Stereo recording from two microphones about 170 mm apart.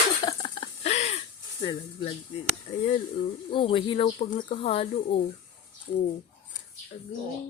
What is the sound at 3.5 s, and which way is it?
Speech, 30° left (ahead or behind).